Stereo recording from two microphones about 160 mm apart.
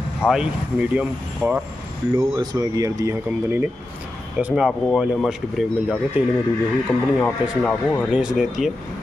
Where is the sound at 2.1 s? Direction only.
20° right (ahead or behind); by 6.2 s centre (ahead or behind).